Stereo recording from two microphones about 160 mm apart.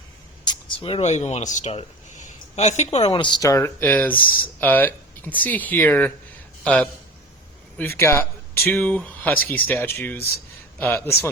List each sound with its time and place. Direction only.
0.4 s speech: 30° left (ahead or behind); by 6.1 s 10° left (ahead or behind)
7.8 s speech: 15° left (ahead or behind)